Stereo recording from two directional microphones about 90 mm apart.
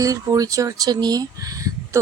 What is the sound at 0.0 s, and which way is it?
A woman's voice, 40° right (ahead or behind).